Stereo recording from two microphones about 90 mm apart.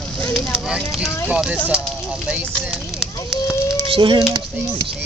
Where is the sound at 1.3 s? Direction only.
15° right (ahead or behind).